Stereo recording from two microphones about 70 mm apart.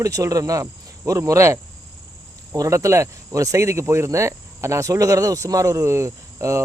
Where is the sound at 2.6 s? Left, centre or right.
Right.